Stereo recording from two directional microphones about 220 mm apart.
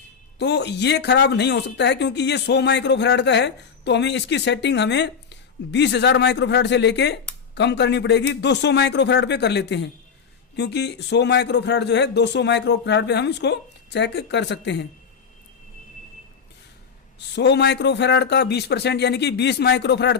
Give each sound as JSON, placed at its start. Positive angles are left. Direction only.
{"t": 0.3, "sound": "speech", "side_deg": 50}
{"t": 17.2, "sound": "speech", "side_deg": 50}